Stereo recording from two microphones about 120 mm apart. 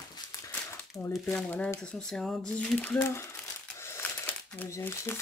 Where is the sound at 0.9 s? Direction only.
25° left (ahead or behind).